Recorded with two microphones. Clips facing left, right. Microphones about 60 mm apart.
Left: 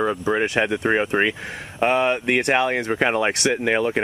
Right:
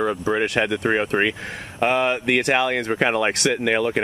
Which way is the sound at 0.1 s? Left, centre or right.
Centre.